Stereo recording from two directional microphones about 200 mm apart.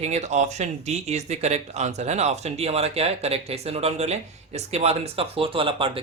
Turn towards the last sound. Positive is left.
turn(degrees=-25)  # may be behind; listen again after turning